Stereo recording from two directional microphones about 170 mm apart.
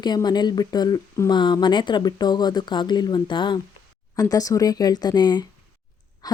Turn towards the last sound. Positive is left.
turn(degrees=20)  # may be behind; listen again after turning